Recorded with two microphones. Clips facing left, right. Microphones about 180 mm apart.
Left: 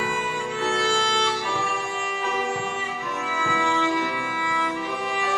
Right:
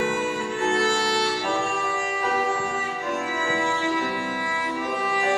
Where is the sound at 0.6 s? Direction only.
45° right (ahead or behind).